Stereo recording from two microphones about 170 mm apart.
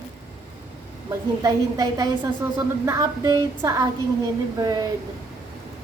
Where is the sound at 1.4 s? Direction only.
20° right (ahead or behind).